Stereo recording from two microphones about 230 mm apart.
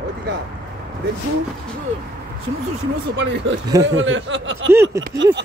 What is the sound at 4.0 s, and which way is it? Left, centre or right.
Speech, right.